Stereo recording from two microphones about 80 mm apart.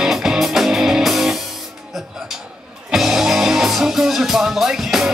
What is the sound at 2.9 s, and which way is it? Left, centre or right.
Music, centre.